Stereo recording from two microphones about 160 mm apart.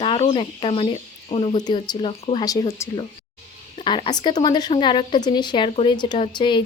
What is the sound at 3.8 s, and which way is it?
Speech, 30° left (ahead or behind).